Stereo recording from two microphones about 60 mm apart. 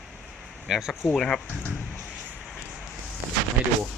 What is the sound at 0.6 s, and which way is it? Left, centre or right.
Speech, centre.